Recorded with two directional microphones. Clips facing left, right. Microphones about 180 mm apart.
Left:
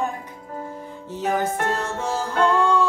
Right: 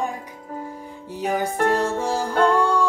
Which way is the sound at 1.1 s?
15° right (ahead or behind).